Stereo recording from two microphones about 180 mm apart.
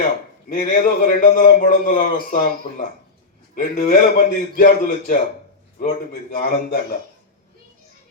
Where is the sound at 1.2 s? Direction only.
45° left (ahead or behind).